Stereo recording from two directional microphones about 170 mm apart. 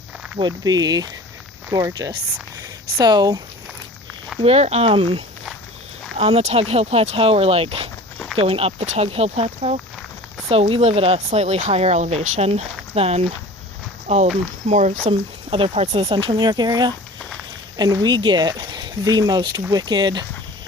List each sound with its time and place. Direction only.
0.3 s speech: 25° right (ahead or behind)
4.4 s speech: 35° right (ahead or behind)
15.4 s speech: 35° right (ahead or behind)